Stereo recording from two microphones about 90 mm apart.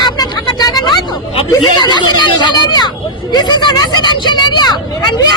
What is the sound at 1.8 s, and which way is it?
Speech, 55° left (ahead or behind).